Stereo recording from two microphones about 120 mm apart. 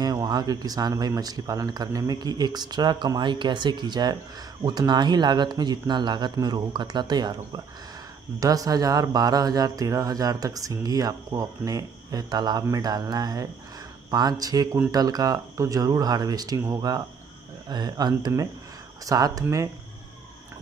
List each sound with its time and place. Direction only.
0.0 s speech: 30° right (ahead or behind)